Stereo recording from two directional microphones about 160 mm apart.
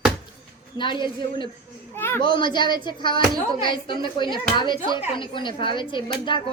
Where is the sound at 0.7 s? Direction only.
30° left (ahead or behind).